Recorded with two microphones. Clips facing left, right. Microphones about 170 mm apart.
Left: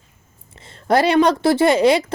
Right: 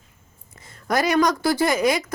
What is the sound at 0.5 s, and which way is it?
Speech, 25° left (ahead or behind).